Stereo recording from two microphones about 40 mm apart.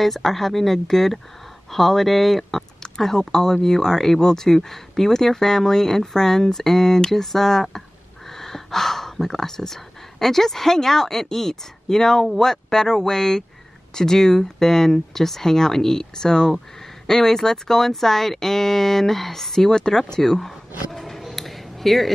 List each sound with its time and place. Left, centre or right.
0.0 s speech: centre